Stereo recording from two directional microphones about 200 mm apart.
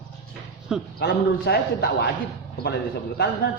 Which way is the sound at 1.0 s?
55° left (ahead or behind).